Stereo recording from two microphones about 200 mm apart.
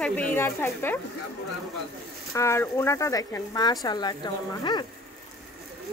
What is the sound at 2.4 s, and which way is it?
Speech, 15° left (ahead or behind).